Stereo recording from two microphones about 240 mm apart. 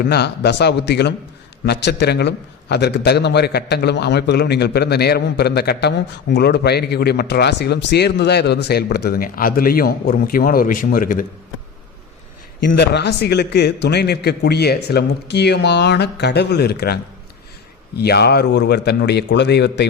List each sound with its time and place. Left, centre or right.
0.0 s a man's voice: left
12.6 s a man's voice: left